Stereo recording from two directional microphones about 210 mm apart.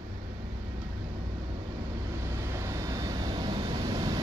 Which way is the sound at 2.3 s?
15° right (ahead or behind).